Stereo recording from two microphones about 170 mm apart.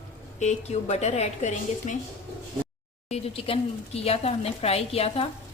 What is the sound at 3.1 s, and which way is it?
A woman's voice, 35° left (ahead or behind).